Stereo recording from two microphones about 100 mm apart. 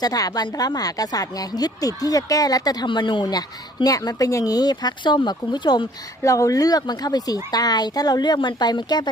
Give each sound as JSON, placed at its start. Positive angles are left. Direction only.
{"t": 0.0, "sound": "speech", "side_deg": 40}
{"t": 6.2, "sound": "speech", "side_deg": 35}